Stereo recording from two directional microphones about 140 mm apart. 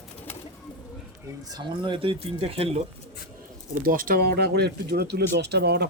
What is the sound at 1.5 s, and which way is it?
Speech, 35° right (ahead or behind).